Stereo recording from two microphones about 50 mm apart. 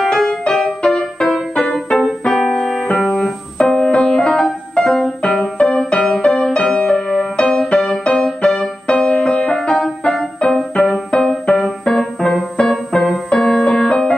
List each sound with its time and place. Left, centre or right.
0.0 s music: centre
2.2 s piano: centre
4.7 s keyboard: centre
5.2 s music: centre
11.1 s keyboard: centre
13.3 s music: centre